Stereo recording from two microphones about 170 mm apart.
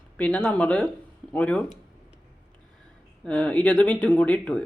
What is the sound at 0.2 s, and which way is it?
Speech, 10° left (ahead or behind).